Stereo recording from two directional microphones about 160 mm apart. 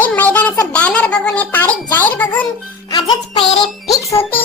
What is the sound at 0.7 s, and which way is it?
Speech, 10° left (ahead or behind).